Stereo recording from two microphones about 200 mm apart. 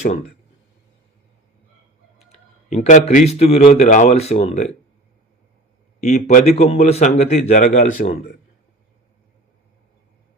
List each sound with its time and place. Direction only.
2.1 s speech: 30° left (ahead or behind)
6.0 s a man's voice: 35° left (ahead or behind)
8.0 s a man's voice: 45° left (ahead or behind)